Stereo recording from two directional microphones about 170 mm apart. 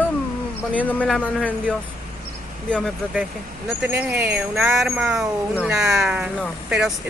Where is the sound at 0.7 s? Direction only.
10° left (ahead or behind).